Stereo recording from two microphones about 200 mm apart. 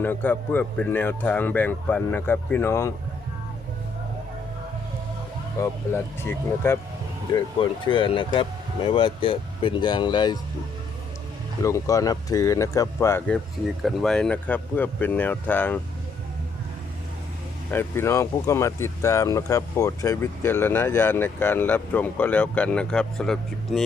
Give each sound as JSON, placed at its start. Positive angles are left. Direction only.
{"t": 0.0, "sound": "speech", "side_deg": 10}
{"t": 5.5, "sound": "speech", "side_deg": 10}
{"t": 11.6, "sound": "speech", "side_deg": 15}
{"t": 17.7, "sound": "speech", "side_deg": 10}